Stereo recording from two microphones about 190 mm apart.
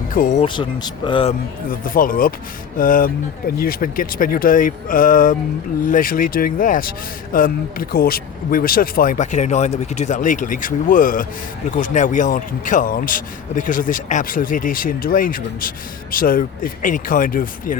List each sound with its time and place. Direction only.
0.1 s speech: 45° left (ahead or behind)
0.4 s speech: 25° left (ahead or behind)
1.3 s speech: 45° left (ahead or behind)